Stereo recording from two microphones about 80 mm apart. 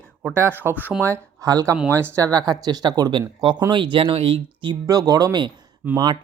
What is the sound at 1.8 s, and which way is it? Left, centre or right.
Speech, right.